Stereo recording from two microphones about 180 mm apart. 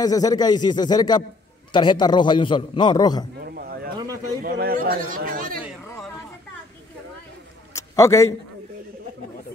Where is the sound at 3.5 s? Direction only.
55° right (ahead or behind).